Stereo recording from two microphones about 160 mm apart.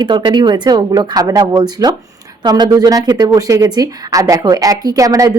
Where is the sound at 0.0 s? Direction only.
30° right (ahead or behind).